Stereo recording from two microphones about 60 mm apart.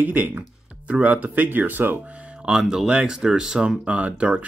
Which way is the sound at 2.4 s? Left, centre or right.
Centre.